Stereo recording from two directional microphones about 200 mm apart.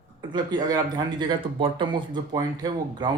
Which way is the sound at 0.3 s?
20° right (ahead or behind).